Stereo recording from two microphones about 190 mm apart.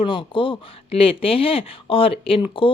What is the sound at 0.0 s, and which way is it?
Speech, 25° left (ahead or behind).